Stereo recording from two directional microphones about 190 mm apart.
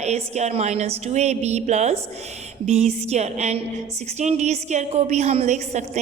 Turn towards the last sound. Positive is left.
turn(degrees=-35)  # may be behind; listen again after turning